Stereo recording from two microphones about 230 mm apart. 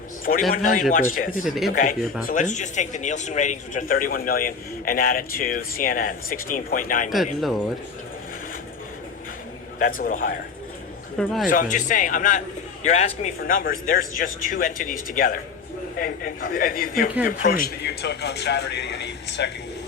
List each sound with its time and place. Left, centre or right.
0.5 s speech: left
1.5 s a man's voice: centre
1.7 s speech: left
9.7 s speech: left
11.2 s a man's voice: centre
11.4 s a man's voice: left